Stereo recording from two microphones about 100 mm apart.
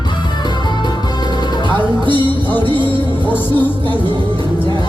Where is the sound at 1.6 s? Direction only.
55° right (ahead or behind).